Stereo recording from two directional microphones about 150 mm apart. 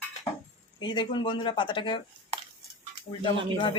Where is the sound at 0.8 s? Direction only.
30° left (ahead or behind).